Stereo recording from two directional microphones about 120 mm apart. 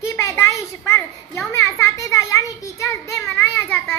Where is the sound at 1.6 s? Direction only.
25° left (ahead or behind).